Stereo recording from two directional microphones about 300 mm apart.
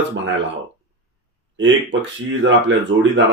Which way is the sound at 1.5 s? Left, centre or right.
Right.